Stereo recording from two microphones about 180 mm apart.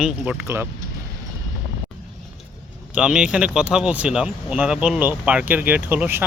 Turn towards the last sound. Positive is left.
turn(degrees=-10)  # may be behind; listen again after turning